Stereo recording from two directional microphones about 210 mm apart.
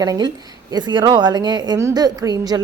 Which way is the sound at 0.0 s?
20° right (ahead or behind).